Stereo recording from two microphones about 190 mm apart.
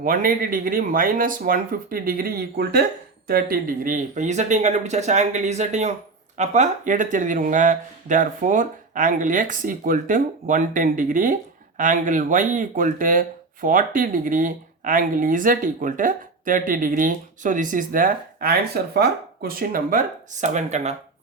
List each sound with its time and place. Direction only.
0.0 s speech: 50° right (ahead or behind)